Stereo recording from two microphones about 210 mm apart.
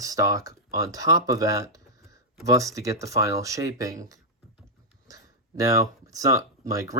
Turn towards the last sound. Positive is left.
turn(degrees=-15)  # may be behind; listen again after turning